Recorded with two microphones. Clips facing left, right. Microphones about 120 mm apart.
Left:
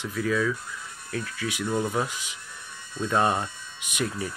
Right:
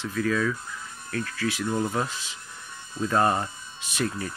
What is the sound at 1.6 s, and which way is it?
Speech, 5° left (ahead or behind).